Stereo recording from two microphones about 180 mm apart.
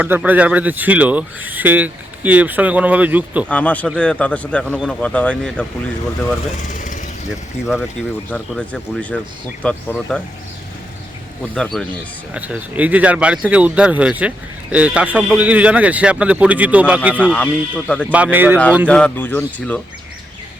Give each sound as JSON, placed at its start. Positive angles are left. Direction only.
{"t": 0.0, "sound": "speech", "side_deg": -10}
{"t": 3.5, "sound": "speech", "side_deg": 10}
{"t": 6.7, "sound": "pigeon", "side_deg": 45}
{"t": 7.3, "sound": "speech", "side_deg": -5}
{"t": 11.5, "sound": "speech", "side_deg": 5}
{"t": 12.3, "sound": "speech", "side_deg": -5}
{"t": 17.3, "sound": "speech", "side_deg": 5}
{"t": 18.1, "sound": "speech", "side_deg": -10}
{"t": 18.9, "sound": "speech", "side_deg": 5}